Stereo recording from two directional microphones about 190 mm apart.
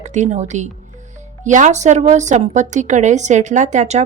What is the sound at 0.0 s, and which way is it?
Speech, 40° right (ahead or behind).